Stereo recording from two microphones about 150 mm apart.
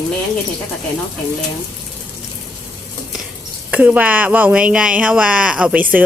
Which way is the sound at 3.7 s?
10° right (ahead or behind).